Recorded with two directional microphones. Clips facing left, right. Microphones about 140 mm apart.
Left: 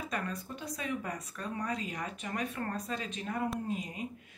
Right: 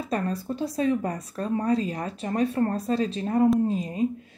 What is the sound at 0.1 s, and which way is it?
Speech, 35° right (ahead or behind).